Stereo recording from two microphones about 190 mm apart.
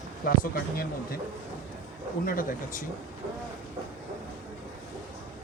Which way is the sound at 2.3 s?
45° left (ahead or behind).